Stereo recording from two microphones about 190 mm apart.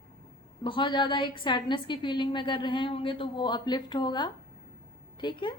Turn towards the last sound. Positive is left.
turn(degrees=25)  # may be behind; listen again after turning